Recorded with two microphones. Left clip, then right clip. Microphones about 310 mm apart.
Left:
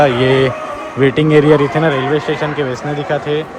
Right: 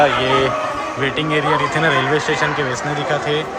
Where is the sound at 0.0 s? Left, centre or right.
Left.